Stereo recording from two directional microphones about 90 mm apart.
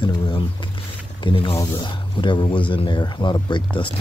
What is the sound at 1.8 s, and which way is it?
Speech, 60° left (ahead or behind).